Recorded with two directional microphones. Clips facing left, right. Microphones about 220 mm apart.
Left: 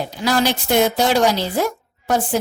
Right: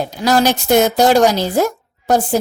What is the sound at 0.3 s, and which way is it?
Speech, 45° right (ahead or behind).